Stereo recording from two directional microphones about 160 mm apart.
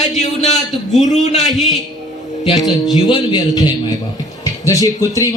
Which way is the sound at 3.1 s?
25° left (ahead or behind).